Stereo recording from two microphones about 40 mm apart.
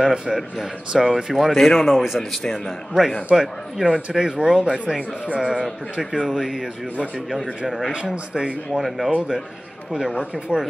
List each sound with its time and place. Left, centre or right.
0.0 s speech: centre
3.3 s speech: centre
7.9 s speech: right
8.7 s speech: centre
10.5 s speech: right